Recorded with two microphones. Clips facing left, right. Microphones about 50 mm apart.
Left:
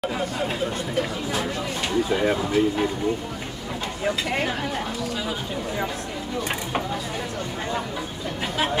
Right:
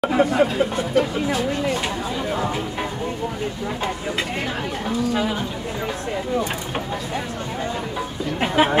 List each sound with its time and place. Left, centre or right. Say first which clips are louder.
0.0 s speech: right 9 dB; right
8.4 s chatter: right 7 dB; right